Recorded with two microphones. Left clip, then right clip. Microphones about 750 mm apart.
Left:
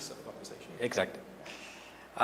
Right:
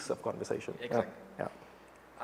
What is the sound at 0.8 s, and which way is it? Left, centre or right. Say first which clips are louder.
Speech: left 6 dB; left.